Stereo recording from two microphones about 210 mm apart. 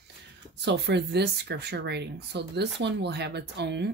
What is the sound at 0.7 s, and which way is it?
Speech, 55° right (ahead or behind).